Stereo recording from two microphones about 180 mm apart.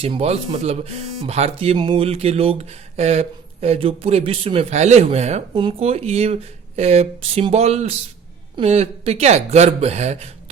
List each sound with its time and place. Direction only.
0.0 s speech: 35° right (ahead or behind)